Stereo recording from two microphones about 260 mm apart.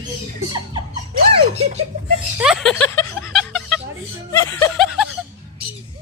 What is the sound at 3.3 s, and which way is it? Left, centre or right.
Music, centre.